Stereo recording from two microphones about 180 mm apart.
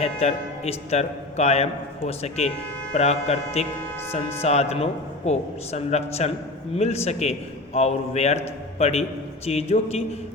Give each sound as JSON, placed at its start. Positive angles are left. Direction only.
{"t": 0.0, "sound": "a man's voice", "side_deg": 35}